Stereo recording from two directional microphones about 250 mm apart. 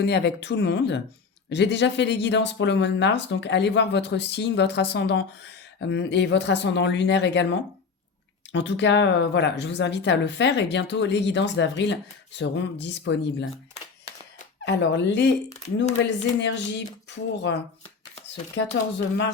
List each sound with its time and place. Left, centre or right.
0.0 s speech: left
8.5 s speech: left
14.6 s speech: left